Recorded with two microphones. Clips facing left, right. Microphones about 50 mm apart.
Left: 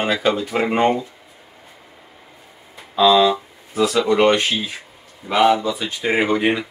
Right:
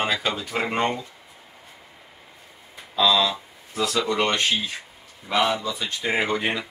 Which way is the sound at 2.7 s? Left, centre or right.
Centre.